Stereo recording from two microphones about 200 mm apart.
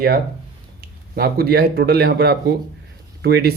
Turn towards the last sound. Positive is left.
turn(degrees=-55)  # may be behind; listen again after turning